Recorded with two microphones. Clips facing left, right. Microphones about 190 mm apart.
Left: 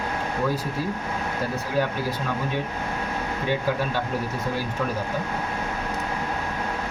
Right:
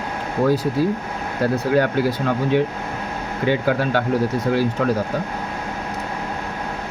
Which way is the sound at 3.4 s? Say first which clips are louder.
Right 7 dB; 70° right (ahead or behind).